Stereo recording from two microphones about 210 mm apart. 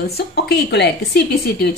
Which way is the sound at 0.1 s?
50° left (ahead or behind).